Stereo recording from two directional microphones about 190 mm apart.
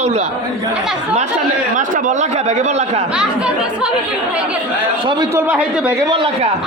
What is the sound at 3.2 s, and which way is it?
Speech, 5° right (ahead or behind).